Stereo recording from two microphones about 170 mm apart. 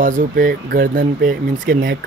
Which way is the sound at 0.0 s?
50° right (ahead or behind).